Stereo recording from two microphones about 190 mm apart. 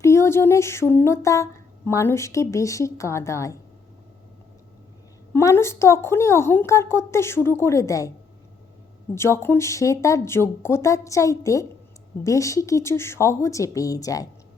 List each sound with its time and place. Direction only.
0.0 s a sound: 15° left (ahead or behind)
1.9 s a woman's voice: 15° left (ahead or behind)
5.3 s a woman's voice: 15° left (ahead or behind)
9.1 s a woman's voice: 15° left (ahead or behind)